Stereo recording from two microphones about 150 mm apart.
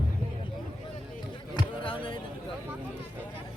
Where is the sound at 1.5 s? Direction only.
35° left (ahead or behind).